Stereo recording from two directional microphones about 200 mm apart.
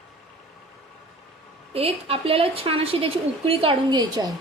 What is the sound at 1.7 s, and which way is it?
A woman's voice, 30° right (ahead or behind).